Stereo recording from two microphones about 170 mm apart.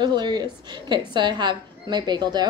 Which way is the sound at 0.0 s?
25° right (ahead or behind).